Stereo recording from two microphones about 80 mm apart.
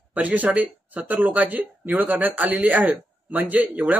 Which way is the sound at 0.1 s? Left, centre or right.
Centre.